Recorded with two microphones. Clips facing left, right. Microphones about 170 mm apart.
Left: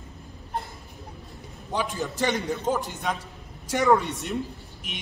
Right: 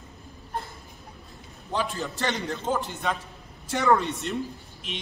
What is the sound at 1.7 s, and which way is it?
A man's voice, 15° left (ahead or behind).